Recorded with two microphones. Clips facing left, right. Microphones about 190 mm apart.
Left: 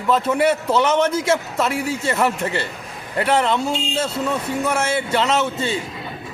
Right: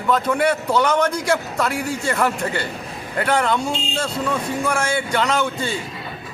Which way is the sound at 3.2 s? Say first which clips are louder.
Left 1 dB; 25° left (ahead or behind).